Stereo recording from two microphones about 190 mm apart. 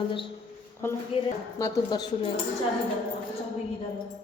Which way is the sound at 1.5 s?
15° left (ahead or behind).